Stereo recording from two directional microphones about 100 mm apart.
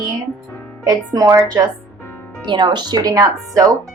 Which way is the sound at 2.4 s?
50° right (ahead or behind).